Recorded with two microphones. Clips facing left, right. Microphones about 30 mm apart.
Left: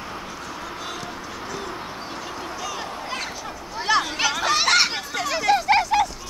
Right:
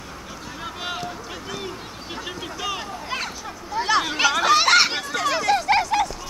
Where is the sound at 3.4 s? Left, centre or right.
Centre.